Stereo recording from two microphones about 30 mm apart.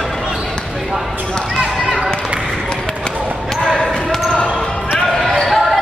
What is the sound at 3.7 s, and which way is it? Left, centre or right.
Basketball bounce, centre.